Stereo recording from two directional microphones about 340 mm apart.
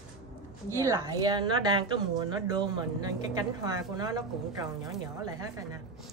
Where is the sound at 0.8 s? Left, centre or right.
Centre.